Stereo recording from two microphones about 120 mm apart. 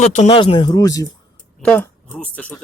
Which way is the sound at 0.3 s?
45° left (ahead or behind).